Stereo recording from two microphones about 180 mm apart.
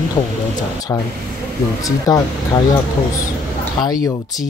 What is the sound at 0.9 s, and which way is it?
Speech, 15° left (ahead or behind).